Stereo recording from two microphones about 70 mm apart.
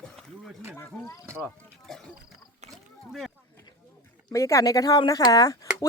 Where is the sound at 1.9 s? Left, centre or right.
Centre.